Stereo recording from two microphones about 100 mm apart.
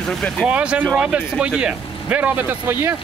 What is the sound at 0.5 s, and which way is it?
Speech, 10° right (ahead or behind).